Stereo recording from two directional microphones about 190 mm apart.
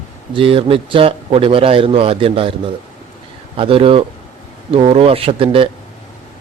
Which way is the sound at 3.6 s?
30° right (ahead or behind).